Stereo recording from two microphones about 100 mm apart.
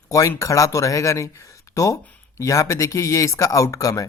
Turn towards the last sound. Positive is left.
turn(degrees=35)  # may be behind; listen again after turning